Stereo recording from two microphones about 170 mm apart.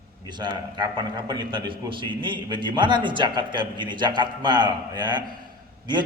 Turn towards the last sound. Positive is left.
turn(degrees=-25)  # may be behind; listen again after turning